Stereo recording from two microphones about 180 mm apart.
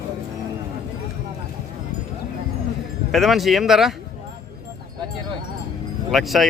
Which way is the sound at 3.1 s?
Centre (ahead or behind).